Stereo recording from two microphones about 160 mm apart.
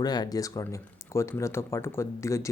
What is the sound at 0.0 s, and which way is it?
Speech, 25° left (ahead or behind).